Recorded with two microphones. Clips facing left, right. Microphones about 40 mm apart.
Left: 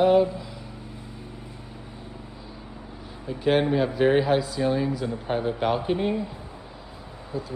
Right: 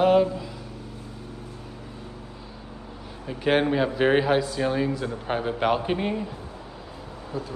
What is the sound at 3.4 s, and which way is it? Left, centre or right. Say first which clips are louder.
A man's voice: even; centre.